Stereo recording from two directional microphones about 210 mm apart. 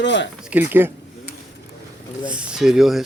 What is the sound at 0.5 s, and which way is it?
Speech, 5° right (ahead or behind).